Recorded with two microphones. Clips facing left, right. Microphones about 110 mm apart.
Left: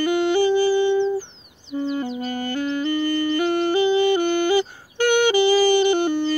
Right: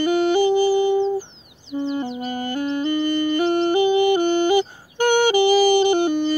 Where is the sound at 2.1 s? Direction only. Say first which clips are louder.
Even; 20° right (ahead or behind).